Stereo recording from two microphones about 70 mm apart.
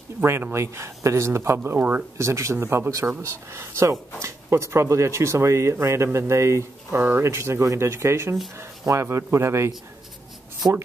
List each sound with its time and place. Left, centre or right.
0.2 s a man's voice: right
2.1 s speech: right
7.0 s a man's voice: right